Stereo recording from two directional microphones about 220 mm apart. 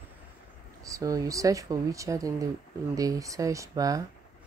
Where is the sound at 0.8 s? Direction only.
15° right (ahead or behind).